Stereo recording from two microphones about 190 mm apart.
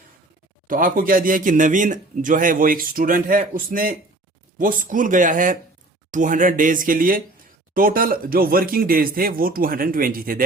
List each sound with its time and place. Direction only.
0.7 s speech: 45° right (ahead or behind)